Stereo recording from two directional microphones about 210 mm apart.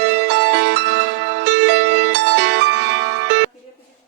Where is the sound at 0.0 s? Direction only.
55° right (ahead or behind).